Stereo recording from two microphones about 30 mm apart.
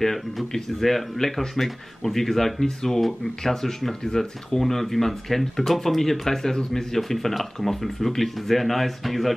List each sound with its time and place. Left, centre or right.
0.0 s speech: centre
4.6 s speech: centre